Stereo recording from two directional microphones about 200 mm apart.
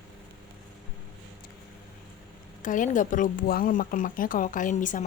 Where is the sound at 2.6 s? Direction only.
40° left (ahead or behind).